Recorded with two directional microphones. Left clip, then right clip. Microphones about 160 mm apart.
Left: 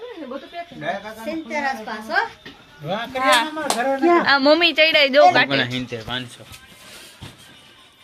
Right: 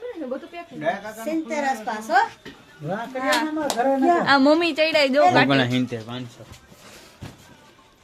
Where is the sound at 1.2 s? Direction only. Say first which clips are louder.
Right 1 dB; 90° right.